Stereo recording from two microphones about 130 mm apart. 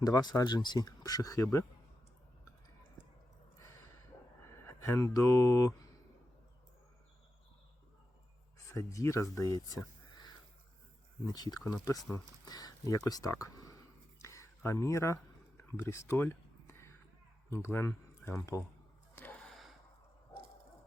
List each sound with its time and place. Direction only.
0.0 s speech: 30° left (ahead or behind)
4.6 s speech: 20° left (ahead or behind)
8.5 s speech: 25° left (ahead or behind)
11.3 s speech: 30° left (ahead or behind)
14.2 s a sound: 25° left (ahead or behind)
17.5 s speech: 20° left (ahead or behind)
19.1 s a sound: 15° left (ahead or behind)
19.5 s gasp: centre (ahead or behind)